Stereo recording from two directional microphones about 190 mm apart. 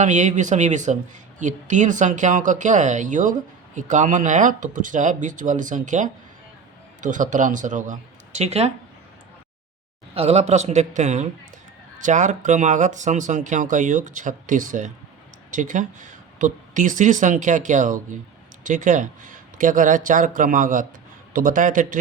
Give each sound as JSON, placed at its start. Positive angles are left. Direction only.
{"t": 0.0, "sound": "speech", "side_deg": -40}
{"t": 10.2, "sound": "speech", "side_deg": -35}